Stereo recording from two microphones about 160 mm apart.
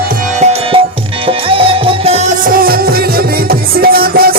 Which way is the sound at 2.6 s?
65° right (ahead or behind).